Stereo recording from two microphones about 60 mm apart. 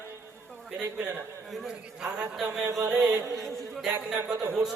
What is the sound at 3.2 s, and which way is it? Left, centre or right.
Speech, right.